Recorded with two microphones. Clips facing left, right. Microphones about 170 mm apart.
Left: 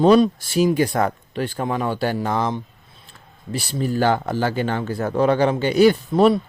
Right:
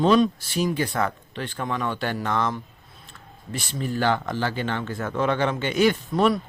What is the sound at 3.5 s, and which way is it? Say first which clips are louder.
Speech: left 5 dB; 35° left (ahead or behind).